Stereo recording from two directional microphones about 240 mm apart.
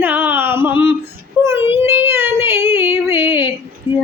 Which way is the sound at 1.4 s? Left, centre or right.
Centre.